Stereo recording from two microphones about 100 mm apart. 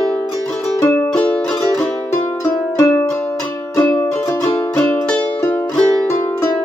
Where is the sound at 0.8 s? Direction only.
25° left (ahead or behind).